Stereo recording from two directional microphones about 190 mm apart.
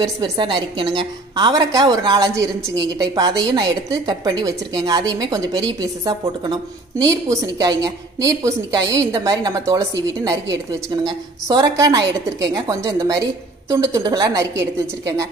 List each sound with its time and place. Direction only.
0.0 s a woman's voice: 25° right (ahead or behind)
11.4 s a woman's voice: 20° right (ahead or behind)